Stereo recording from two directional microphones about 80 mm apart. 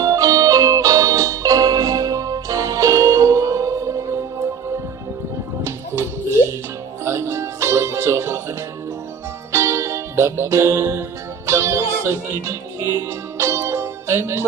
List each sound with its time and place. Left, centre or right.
0.0 s music: right
5.6 s music: right
7.1 s music: right
9.5 s music: right